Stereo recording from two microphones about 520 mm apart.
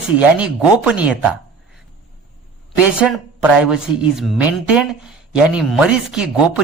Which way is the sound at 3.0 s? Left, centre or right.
Centre.